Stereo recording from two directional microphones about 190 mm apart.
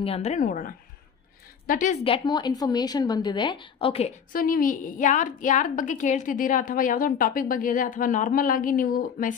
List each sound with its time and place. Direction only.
0.0 s a woman's voice: 35° left (ahead or behind)
2.0 s a woman's voice: 25° left (ahead or behind)
4.3 s a woman's voice: 50° left (ahead or behind)